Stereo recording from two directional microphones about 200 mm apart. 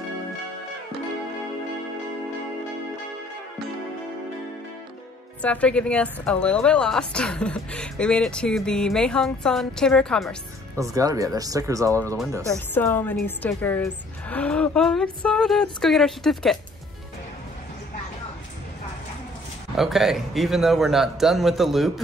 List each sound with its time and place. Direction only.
5.4 s a woman's voice: 5° left (ahead or behind)
10.8 s speech: 15° right (ahead or behind)
12.7 s a woman's voice: 10° left (ahead or behind)
19.8 s a woman's voice: centre (ahead or behind)